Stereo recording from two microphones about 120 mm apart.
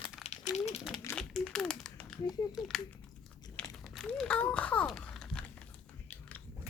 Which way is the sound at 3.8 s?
Centre (ahead or behind).